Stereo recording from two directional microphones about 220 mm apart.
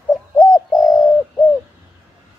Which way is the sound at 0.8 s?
15° left (ahead or behind).